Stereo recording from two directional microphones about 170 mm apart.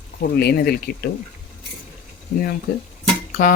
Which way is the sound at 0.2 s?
65° left (ahead or behind).